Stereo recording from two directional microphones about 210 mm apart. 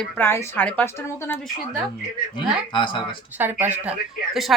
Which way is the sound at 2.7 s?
20° left (ahead or behind).